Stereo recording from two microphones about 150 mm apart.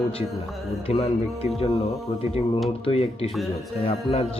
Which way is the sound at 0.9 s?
40° left (ahead or behind).